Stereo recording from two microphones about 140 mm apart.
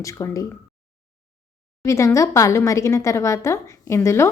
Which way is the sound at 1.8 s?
20° left (ahead or behind).